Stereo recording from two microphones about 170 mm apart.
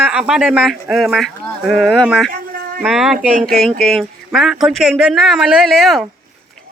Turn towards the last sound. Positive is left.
turn(degrees=0)  # may be behind; listen again after turning